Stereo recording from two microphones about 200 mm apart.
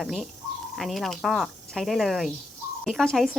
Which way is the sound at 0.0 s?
Centre (ahead or behind).